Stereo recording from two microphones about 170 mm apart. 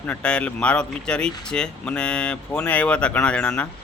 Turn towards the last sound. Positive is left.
turn(degrees=5)  # may be behind; listen again after turning